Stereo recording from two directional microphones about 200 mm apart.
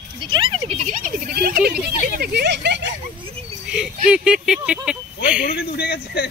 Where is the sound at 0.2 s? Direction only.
25° right (ahead or behind); by 2.8 s 60° right (ahead or behind).